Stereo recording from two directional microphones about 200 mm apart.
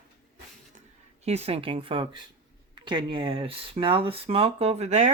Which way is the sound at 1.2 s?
30° right (ahead or behind).